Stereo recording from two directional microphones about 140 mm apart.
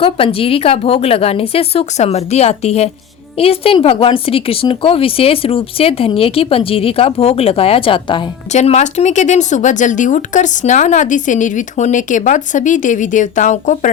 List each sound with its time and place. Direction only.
0.0 s speech: 40° left (ahead or behind)
8.5 s speech: 55° left (ahead or behind)